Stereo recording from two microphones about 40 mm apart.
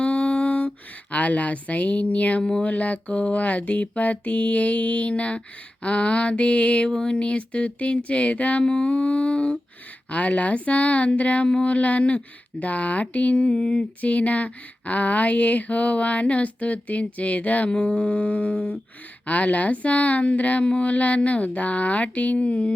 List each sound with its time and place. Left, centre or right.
0.0 s a sound: left
1.1 s speech: left
2.4 s mantra: left
2.6 s speech: left
8.6 s mantra: left
10.1 s speech: left
17.7 s mantra: left
19.2 s speech: left